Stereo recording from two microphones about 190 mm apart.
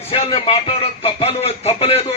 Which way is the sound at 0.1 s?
30° left (ahead or behind).